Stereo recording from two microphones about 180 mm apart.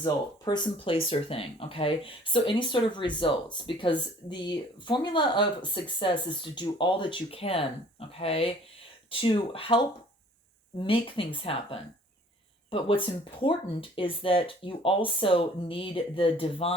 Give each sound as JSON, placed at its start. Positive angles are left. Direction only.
{"t": 0.0, "sound": "speech", "side_deg": 25}